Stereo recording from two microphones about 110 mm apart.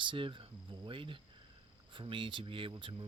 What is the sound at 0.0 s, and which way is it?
Speech, 50° right (ahead or behind).